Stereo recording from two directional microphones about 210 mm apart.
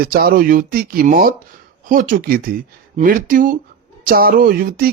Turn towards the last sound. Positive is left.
turn(degrees=-45)  # may be behind; listen again after turning